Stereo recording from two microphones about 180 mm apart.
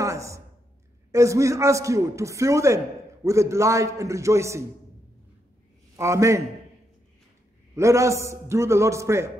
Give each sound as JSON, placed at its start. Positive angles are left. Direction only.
{"t": 0.0, "sound": "a sound", "side_deg": -15}
{"t": 1.1, "sound": "a man's voice", "side_deg": -15}
{"t": 5.9, "sound": "a man's voice", "side_deg": -15}
{"t": 7.7, "sound": "a man's voice", "side_deg": -15}